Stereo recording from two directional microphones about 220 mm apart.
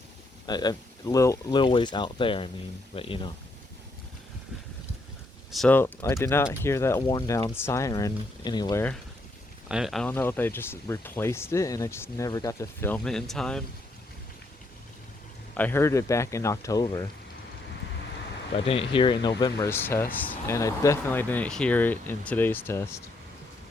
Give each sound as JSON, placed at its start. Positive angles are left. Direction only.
{"t": 0.4, "sound": "speech", "side_deg": 20}
{"t": 5.5, "sound": "speech", "side_deg": 5}
{"t": 9.6, "sound": "speech", "side_deg": 0}
{"t": 15.5, "sound": "speech", "side_deg": 10}
{"t": 18.5, "sound": "speech", "side_deg": 25}